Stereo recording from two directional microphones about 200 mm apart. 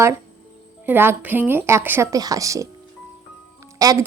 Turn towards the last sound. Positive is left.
turn(degrees=-20)  # may be behind; listen again after turning